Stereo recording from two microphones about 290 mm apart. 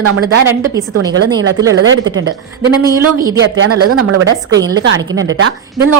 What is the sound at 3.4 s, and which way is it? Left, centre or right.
Speech, right.